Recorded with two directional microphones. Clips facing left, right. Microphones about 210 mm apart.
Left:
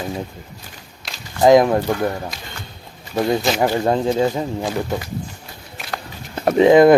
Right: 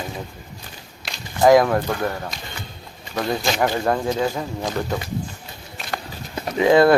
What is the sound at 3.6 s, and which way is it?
Speech, 25° left (ahead or behind).